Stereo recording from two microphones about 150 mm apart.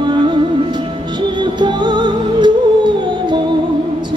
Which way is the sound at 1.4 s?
30° right (ahead or behind).